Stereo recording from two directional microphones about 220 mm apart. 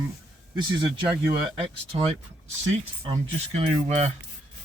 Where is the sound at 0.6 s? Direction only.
20° right (ahead or behind).